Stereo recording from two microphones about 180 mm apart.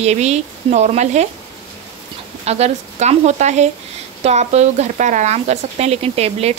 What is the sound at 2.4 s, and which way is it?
Speech, 35° right (ahead or behind).